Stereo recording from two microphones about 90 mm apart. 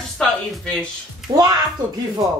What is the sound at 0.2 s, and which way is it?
Speech, 10° left (ahead or behind).